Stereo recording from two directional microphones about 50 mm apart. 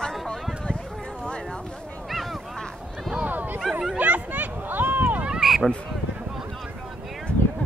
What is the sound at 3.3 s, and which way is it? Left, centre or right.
Bow-wow, right.